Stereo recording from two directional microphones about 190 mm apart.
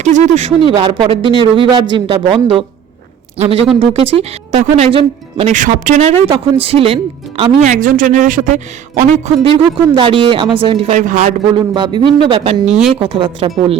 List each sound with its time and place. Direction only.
0.0 s speech: 40° right (ahead or behind)
9.7 s speech: 25° right (ahead or behind)
11.5 s speech: 25° right (ahead or behind)
12.6 s speech: 5° right (ahead or behind)
13.0 s speech: 25° right (ahead or behind)